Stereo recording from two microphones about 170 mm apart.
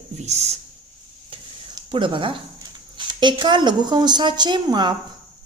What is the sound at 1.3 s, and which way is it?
Stir, 30° right (ahead or behind).